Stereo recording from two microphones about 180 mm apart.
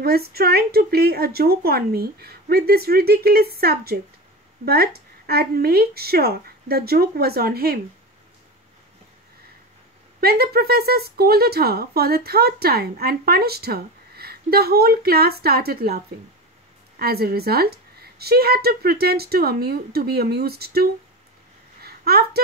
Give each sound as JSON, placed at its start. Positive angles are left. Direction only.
{"t": 0.0, "sound": "speech", "side_deg": -60}
{"t": 10.2, "sound": "speech", "side_deg": -60}
{"t": 17.0, "sound": "speech", "side_deg": -60}
{"t": 21.8, "sound": "a sound", "side_deg": -60}